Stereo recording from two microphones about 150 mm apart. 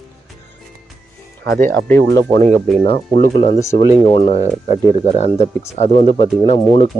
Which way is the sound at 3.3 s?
50° left (ahead or behind).